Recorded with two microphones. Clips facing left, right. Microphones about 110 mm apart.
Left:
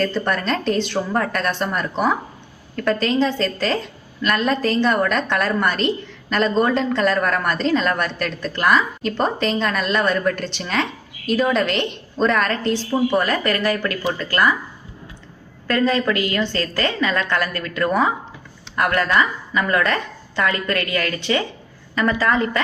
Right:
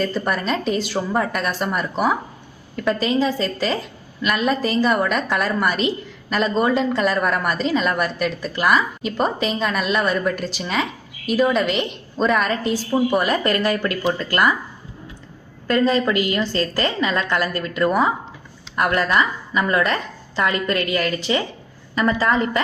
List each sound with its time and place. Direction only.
0.0 s a woman's voice: 5° right (ahead or behind)
13.4 s a woman's voice: 25° right (ahead or behind)
15.6 s a woman's voice: 25° right (ahead or behind)
17.8 s a woman's voice: 5° right (ahead or behind)
18.9 s a woman's voice: 20° right (ahead or behind)